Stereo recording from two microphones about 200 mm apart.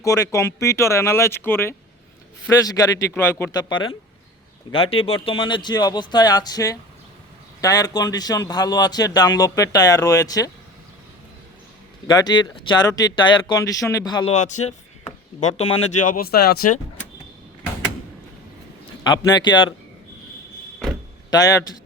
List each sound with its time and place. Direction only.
0.0 s a man's voice: 15° left (ahead or behind)
12.0 s a man's voice: 20° left (ahead or behind)
14.3 s speech: 35° left (ahead or behind)
16.0 s speech: 50° left (ahead or behind)
19.0 s a man's voice: 20° left (ahead or behind)
21.2 s a man's voice: 20° left (ahead or behind)